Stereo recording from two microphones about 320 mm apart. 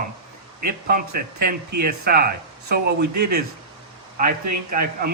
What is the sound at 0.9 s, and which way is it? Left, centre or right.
Speech, right.